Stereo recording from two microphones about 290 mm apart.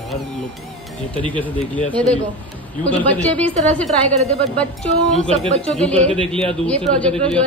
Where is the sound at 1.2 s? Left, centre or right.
Centre.